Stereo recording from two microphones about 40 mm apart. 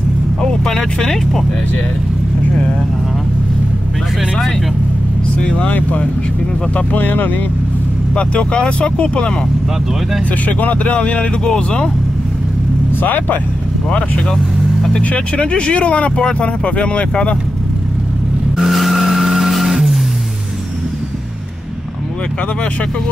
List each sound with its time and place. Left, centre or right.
0.4 s speech: centre
5.6 s speech: left
8.2 s speech: left
10.4 s speech: left
11.4 s speech: centre
13.0 s speech: left
14.9 s speech: left
18.6 s vehicle: centre